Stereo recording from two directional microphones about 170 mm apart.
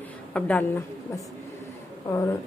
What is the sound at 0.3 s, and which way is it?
A woman's voice, 10° left (ahead or behind).